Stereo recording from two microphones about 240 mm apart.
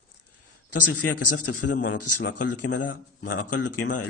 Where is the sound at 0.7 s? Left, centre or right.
Left.